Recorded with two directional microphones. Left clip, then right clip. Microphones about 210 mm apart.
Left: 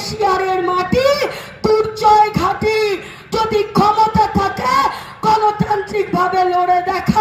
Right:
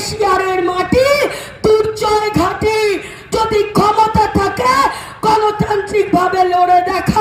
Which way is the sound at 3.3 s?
25° right (ahead or behind).